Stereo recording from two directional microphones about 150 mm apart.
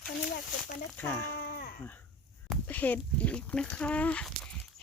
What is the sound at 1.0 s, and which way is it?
Speech, 15° left (ahead or behind).